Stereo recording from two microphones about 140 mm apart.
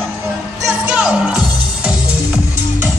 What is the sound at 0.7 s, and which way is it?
Music, 5° right (ahead or behind).